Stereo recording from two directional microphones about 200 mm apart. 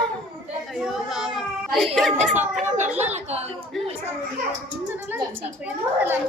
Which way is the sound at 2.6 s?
35° right (ahead or behind).